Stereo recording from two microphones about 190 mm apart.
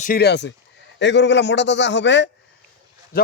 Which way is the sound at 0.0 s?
55° left (ahead or behind).